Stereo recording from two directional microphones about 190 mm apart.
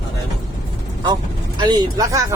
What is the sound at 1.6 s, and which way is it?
Speech, 20° right (ahead or behind).